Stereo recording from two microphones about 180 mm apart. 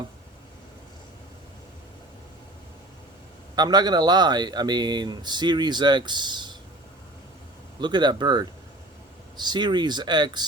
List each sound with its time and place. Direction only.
3.5 s speech: 20° right (ahead or behind)
7.8 s speech: 25° right (ahead or behind)